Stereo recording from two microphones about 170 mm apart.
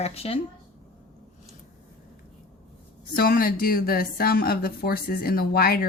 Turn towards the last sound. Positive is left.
turn(degrees=65)  # may be behind; listen again after turning